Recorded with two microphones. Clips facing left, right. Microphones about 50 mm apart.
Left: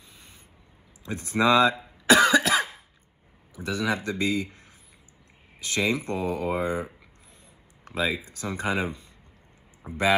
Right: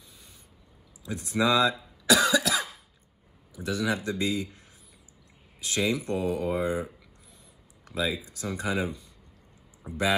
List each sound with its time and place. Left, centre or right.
1.0 s cough: left
3.5 s speech: left